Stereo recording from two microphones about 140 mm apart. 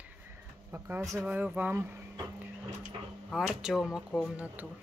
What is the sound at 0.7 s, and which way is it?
Speech, 15° right (ahead or behind).